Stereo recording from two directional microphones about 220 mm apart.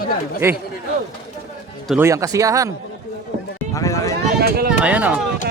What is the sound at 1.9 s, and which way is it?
Speech, 10° right (ahead or behind).